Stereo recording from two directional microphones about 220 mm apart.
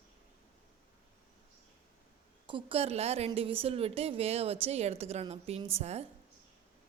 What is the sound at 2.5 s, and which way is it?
A woman's voice, 25° right (ahead or behind).